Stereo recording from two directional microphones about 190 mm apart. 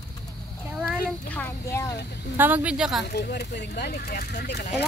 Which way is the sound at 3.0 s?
55° left (ahead or behind).